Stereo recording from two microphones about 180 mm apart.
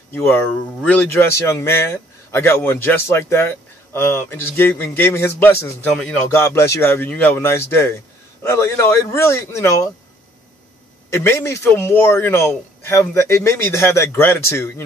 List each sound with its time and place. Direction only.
0.1 s speech: 10° left (ahead or behind)
11.1 s speech: 15° left (ahead or behind)